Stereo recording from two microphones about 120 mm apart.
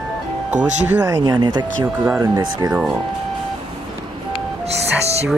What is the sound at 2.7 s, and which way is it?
Speech, 5° right (ahead or behind).